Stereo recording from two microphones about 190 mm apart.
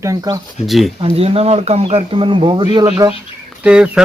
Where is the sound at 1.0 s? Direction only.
30° right (ahead or behind).